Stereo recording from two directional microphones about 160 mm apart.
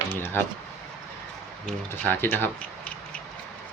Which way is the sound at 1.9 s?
15° left (ahead or behind).